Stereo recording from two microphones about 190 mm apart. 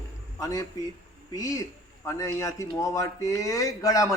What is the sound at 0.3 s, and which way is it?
A man's voice, 20° left (ahead or behind).